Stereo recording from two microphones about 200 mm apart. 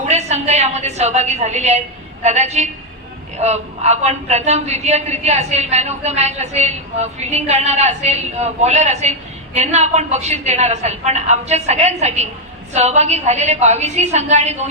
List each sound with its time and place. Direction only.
0.1 s a man's voice: 35° right (ahead or behind)